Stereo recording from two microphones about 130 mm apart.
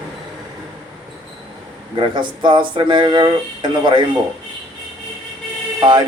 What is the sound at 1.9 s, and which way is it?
Speech, 40° right (ahead or behind).